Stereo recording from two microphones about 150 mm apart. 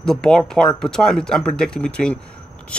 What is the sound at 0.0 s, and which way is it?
A man's voice, 5° left (ahead or behind).